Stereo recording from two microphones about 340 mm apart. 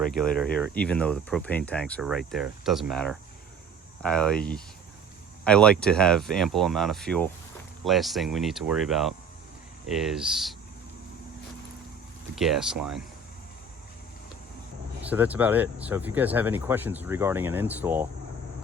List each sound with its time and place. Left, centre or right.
0.0 s speech: centre
12.4 s speech: centre
15.1 s speech: centre